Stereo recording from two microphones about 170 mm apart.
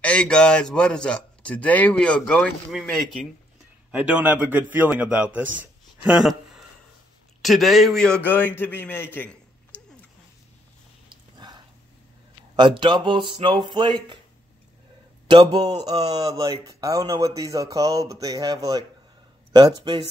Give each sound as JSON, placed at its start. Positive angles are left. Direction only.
{"t": 0.0, "sound": "speech", "side_deg": 5}
{"t": 3.9, "sound": "a man's voice", "side_deg": -10}
{"t": 11.3, "sound": "a sound", "side_deg": -25}
{"t": 12.5, "sound": "speech", "side_deg": -30}
{"t": 15.2, "sound": "speech", "side_deg": -25}